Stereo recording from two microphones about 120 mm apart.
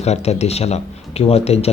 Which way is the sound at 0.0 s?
65° left (ahead or behind).